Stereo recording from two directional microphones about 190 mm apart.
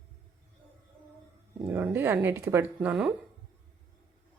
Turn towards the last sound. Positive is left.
turn(degrees=-5)  # may be behind; listen again after turning